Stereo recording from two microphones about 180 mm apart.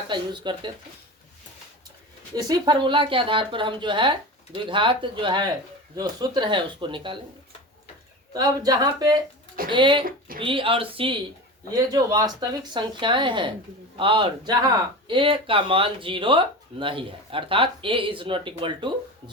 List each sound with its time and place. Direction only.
0.1 s speech: 25° right (ahead or behind)
2.3 s speech: 25° right (ahead or behind)
8.3 s speech: 20° right (ahead or behind)